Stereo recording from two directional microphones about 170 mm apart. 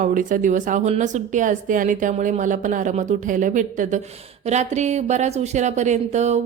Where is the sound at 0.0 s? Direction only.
50° right (ahead or behind).